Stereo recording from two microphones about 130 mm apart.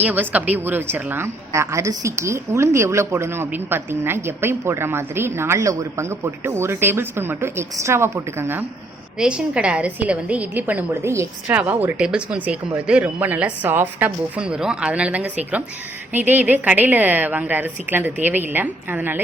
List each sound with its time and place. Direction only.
0.0 s a woman's voice: 15° right (ahead or behind)
9.1 s a woman's voice: 5° right (ahead or behind)